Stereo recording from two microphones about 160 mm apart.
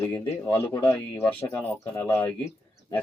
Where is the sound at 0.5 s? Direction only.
20° left (ahead or behind).